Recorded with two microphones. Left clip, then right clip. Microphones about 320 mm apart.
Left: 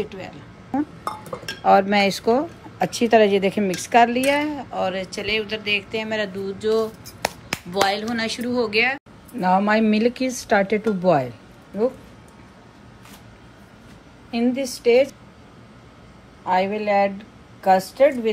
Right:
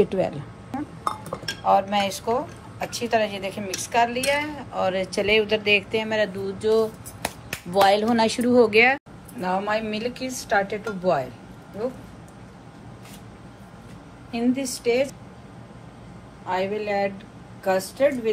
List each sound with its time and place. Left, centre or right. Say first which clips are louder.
0.0 s speech: right 9 dB; centre
1.9 s a woman's voice: left 5 dB; left; by 6.9 s centre
7.2 s finger snapping: left 7 dB; left
7.7 s speech: right 4 dB; centre
9.4 s a woman's voice: left 6 dB; left
14.3 s a woman's voice: left 2 dB; left
16.4 s a woman's voice: left 5 dB; left